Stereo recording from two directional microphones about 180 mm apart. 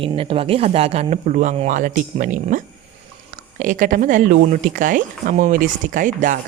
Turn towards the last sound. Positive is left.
turn(degrees=-45)  # may be behind; listen again after turning